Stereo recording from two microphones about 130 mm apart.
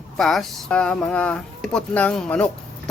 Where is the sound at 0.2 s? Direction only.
5° left (ahead or behind).